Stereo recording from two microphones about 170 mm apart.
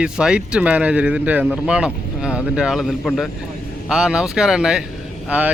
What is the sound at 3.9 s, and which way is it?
Speech, 5° right (ahead or behind).